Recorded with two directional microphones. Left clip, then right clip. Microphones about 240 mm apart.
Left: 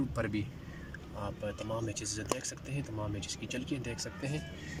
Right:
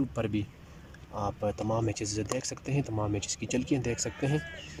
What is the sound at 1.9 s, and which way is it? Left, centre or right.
Speech, right.